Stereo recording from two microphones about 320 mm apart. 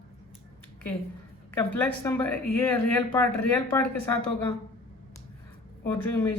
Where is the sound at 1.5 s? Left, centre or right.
Centre.